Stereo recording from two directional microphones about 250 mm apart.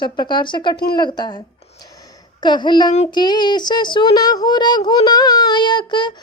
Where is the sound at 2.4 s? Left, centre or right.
Centre.